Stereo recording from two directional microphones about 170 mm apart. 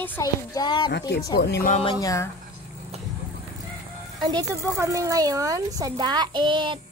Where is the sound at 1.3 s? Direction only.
65° left (ahead or behind).